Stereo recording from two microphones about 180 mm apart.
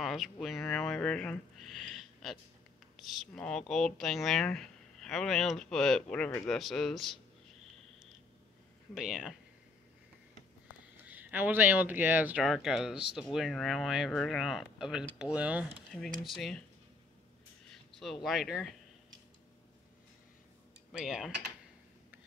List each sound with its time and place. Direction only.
0.0 s speech: centre (ahead or behind)
8.9 s speech: 5° right (ahead or behind)
11.0 s speech: 10° right (ahead or behind)
17.6 s speech: centre (ahead or behind)
20.9 s speech: 5° right (ahead or behind)